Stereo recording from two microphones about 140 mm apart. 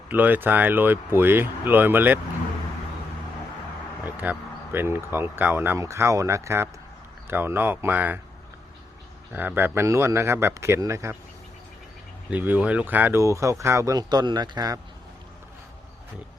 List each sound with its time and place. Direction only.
0.1 s speech: 15° right (ahead or behind)
4.0 s speech: 15° right (ahead or behind)
9.3 s speech: 15° right (ahead or behind)
12.3 s speech: 10° right (ahead or behind); by 14.8 s 30° right (ahead or behind)